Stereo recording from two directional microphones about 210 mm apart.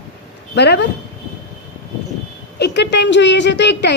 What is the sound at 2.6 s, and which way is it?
A woman's voice, 55° left (ahead or behind).